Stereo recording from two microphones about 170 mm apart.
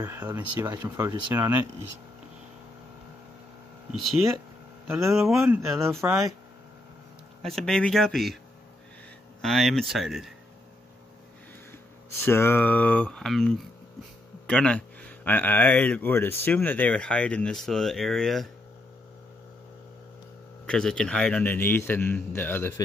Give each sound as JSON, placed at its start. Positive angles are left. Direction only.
{"t": 0.0, "sound": "speech", "side_deg": -15}
{"t": 4.8, "sound": "speech", "side_deg": -5}
{"t": 7.4, "sound": "speech", "side_deg": 5}
{"t": 9.4, "sound": "speech", "side_deg": 0}
{"t": 12.3, "sound": "speech", "side_deg": 15}
{"t": 20.6, "sound": "speech", "side_deg": 5}